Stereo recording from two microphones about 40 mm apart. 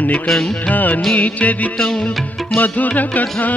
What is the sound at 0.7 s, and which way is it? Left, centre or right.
Music, left.